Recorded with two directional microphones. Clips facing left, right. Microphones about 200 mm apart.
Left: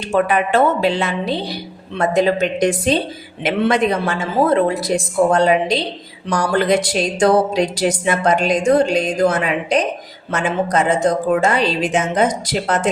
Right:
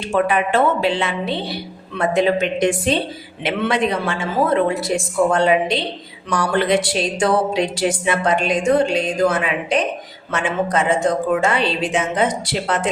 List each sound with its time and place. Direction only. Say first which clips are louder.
0.1 s a woman's voice: left 2 dB; 40° left (ahead or behind)